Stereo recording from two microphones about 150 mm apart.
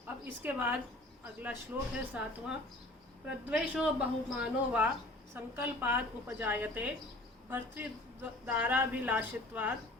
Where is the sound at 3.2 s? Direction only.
5° right (ahead or behind).